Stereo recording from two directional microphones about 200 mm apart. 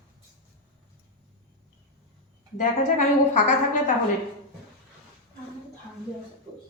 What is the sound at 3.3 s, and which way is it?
Speech, 35° left (ahead or behind).